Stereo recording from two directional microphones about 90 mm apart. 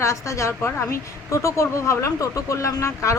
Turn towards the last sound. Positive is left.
turn(degrees=35)  # may be behind; listen again after turning